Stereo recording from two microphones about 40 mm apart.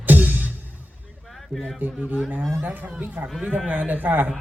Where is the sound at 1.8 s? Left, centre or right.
Right.